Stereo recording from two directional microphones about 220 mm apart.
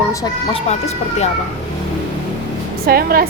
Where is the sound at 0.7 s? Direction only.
30° left (ahead or behind).